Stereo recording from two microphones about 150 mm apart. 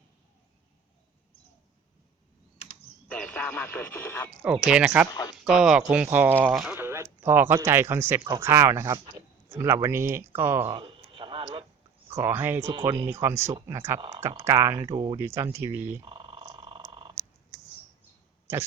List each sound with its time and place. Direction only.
3.1 s speech: 5° left (ahead or behind)
4.4 s speech: 5° right (ahead or behind)
5.1 s speech: 25° left (ahead or behind)
5.5 s speech: 5° right (ahead or behind)
6.1 s speech: 15° right (ahead or behind)
6.7 s speech: 15° right (ahead or behind)
10.8 s a sound: 35° right (ahead or behind)
12.1 s speech: 15° right (ahead or behind)
16.0 s a sound: 35° right (ahead or behind)